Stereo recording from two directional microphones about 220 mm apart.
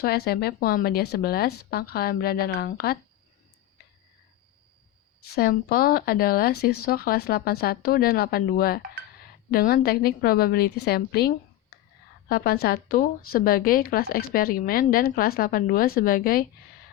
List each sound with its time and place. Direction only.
0.0 s speech: 45° left (ahead or behind)
5.3 s speech: 45° left (ahead or behind)